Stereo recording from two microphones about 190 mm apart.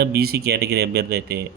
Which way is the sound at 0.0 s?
55° right (ahead or behind).